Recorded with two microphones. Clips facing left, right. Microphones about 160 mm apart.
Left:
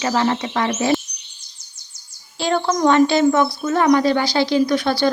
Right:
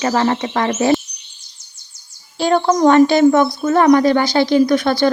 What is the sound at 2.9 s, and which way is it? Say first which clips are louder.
Speech: right 4 dB; 50° right (ahead or behind).